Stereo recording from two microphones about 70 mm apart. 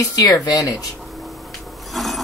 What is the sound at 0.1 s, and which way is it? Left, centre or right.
Speech, left.